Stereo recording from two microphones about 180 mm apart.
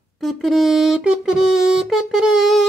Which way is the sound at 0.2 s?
Centre (ahead or behind).